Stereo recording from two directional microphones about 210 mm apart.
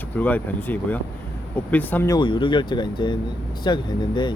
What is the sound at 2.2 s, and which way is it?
Speech, 25° left (ahead or behind).